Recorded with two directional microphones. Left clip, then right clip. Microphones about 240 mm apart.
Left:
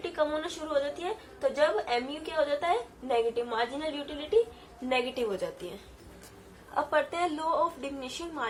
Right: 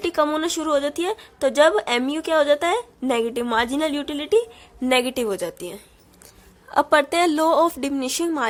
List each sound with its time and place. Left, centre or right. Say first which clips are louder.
0.0 s a woman's voice: right 9 dB; right